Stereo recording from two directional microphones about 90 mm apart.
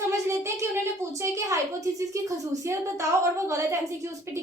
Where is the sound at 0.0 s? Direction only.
30° right (ahead or behind).